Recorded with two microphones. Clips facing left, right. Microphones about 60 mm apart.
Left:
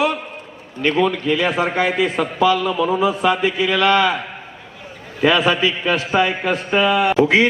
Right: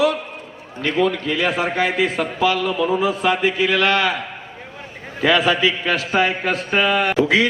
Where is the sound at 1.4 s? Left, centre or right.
Left.